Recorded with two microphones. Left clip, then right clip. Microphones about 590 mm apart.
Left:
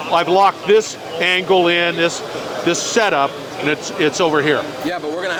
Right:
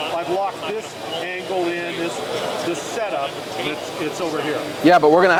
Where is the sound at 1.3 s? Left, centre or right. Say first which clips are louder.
Left 11 dB; left.